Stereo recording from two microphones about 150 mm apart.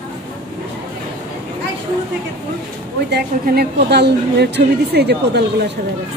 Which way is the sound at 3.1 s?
90° right.